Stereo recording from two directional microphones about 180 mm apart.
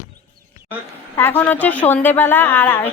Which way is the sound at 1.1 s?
10° left (ahead or behind).